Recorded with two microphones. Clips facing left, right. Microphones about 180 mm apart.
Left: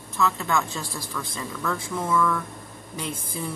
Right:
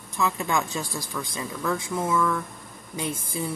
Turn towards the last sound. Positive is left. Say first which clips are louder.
# right 2 dB
turn(degrees=-10)  # may be behind; listen again after turning